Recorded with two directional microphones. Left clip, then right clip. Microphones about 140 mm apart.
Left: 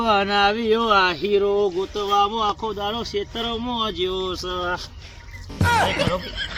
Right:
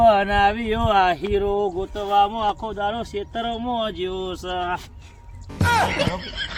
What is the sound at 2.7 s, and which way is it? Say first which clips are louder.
Speech: even; 35° right (ahead or behind).